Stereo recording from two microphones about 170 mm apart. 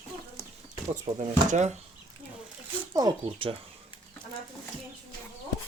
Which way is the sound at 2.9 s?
25° right (ahead or behind).